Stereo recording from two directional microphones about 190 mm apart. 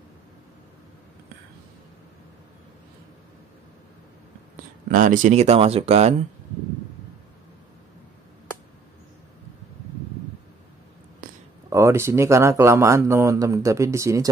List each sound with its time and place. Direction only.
4.9 s speech: 45° right (ahead or behind)
11.7 s speech: 15° right (ahead or behind)